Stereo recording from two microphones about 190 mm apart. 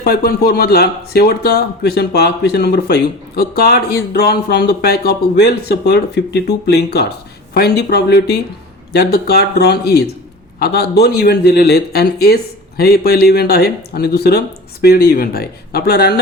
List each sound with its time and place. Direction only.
0.0 s a man's voice: 50° left (ahead or behind)